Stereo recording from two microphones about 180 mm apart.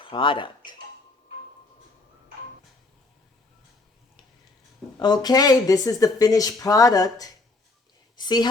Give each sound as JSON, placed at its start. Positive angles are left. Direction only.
{"t": 0.0, "sound": "speech", "side_deg": 30}
{"t": 4.9, "sound": "speech", "side_deg": 25}
{"t": 8.1, "sound": "a sound", "side_deg": 25}